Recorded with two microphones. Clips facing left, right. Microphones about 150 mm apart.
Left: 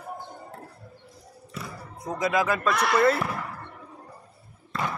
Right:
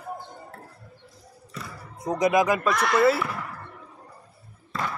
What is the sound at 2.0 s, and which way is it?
Speech, 20° right (ahead or behind).